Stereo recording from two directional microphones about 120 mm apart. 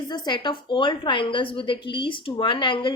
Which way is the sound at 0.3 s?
40° left (ahead or behind).